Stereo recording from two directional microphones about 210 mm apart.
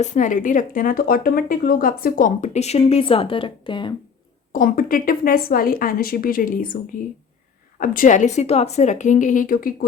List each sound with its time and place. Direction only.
0.0 s speech: 35° left (ahead or behind)
4.5 s a woman's voice: 40° left (ahead or behind)
7.8 s speech: 40° left (ahead or behind)